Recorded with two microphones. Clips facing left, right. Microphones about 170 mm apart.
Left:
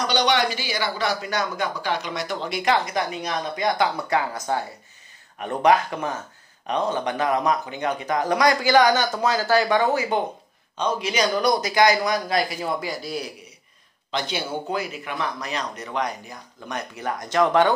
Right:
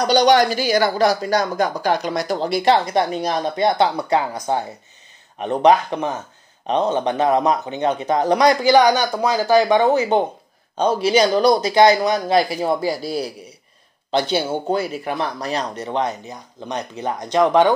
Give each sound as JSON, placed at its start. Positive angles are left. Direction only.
{"t": 0.0, "sound": "speech", "side_deg": -40}